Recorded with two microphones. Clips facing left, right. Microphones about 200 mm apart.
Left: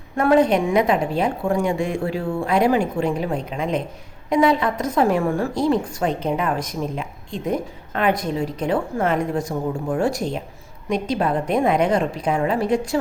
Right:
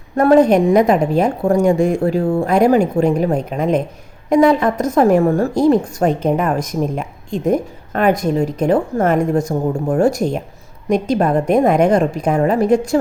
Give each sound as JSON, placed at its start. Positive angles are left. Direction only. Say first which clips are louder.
{"t": 0.2, "sound": "a woman's voice", "louder": "right 6 dB", "side_deg": -40}